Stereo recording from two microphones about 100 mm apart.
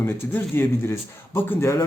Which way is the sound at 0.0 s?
25° left (ahead or behind).